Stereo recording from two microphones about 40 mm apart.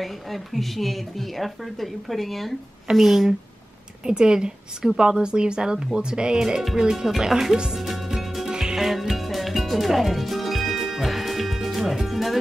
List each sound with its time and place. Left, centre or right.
0.0 s speech: centre
4.0 s speech: centre
8.5 s music: centre